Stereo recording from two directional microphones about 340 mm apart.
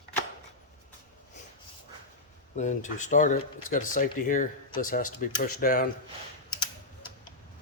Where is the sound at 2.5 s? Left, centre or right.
Left.